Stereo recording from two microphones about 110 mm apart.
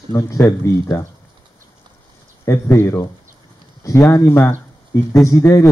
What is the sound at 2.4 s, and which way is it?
Speech, 25° left (ahead or behind).